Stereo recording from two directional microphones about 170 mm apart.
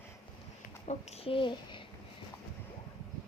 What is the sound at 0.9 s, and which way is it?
Speech, 40° left (ahead or behind).